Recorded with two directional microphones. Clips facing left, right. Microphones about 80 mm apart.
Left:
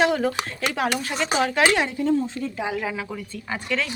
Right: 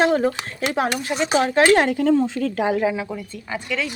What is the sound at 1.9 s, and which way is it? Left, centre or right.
Speech, right.